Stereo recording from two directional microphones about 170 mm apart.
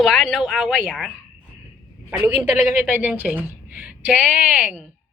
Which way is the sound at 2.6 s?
10° right (ahead or behind).